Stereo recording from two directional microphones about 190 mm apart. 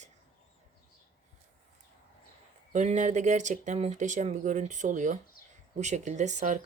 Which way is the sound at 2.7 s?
40° right (ahead or behind).